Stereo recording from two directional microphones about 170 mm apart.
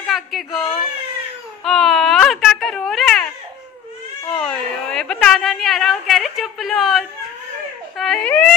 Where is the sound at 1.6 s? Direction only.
Centre (ahead or behind).